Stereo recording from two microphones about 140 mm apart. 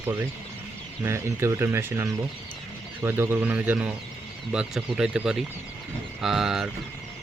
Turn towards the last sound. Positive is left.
turn(degrees=-5)  # may be behind; listen again after turning